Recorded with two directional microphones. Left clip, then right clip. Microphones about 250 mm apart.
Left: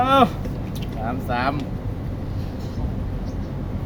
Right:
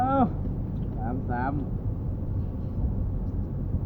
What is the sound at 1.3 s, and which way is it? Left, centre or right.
Music, left.